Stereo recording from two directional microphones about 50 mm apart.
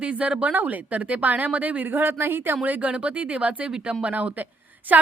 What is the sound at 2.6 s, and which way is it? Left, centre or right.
A woman's voice, right.